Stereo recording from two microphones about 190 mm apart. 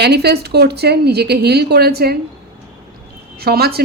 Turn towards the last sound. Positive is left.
turn(degrees=-55)  # may be behind; listen again after turning